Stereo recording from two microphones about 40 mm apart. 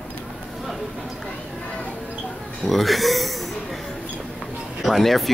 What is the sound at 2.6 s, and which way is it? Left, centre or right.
Speech, centre.